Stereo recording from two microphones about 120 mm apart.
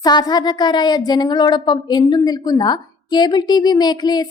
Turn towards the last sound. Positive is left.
turn(degrees=35)  # may be behind; listen again after turning